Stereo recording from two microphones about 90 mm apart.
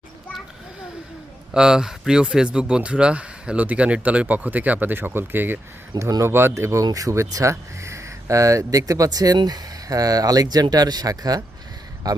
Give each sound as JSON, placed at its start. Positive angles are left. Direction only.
{"t": 1.5, "sound": "speech", "side_deg": -5}
{"t": 6.0, "sound": "speech", "side_deg": -35}